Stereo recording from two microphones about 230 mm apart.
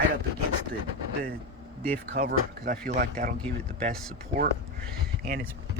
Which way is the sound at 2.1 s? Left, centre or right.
Right.